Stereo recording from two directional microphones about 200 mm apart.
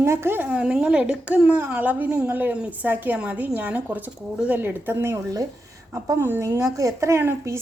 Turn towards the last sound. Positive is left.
turn(degrees=-15)  # may be behind; listen again after turning